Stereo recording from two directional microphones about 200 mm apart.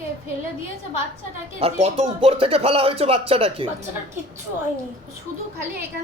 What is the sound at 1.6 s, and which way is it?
Speech, 30° right (ahead or behind).